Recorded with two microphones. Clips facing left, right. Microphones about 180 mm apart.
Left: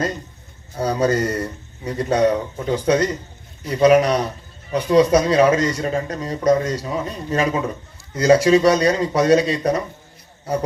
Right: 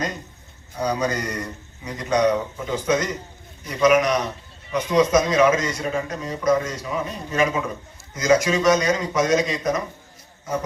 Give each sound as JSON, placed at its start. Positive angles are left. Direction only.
{"t": 0.8, "sound": "a man's voice", "side_deg": 35}